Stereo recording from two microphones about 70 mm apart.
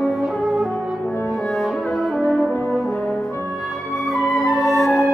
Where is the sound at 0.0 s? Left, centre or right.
Centre.